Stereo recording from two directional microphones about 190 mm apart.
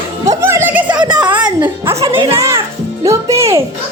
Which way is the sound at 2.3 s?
15° right (ahead or behind).